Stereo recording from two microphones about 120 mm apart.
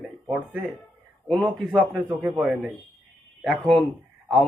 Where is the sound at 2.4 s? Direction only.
10° right (ahead or behind).